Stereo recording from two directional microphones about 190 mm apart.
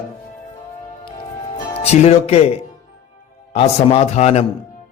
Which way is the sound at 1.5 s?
35° left (ahead or behind).